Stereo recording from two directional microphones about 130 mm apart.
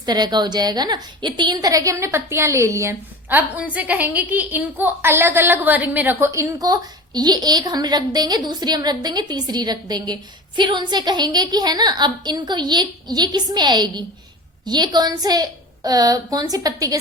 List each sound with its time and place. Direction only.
0.0 s a woman's voice: 30° right (ahead or behind)